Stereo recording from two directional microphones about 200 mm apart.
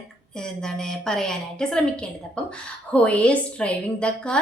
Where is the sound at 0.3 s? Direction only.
5° left (ahead or behind).